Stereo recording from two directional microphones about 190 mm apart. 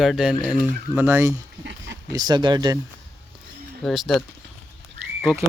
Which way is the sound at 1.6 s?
70° right (ahead or behind).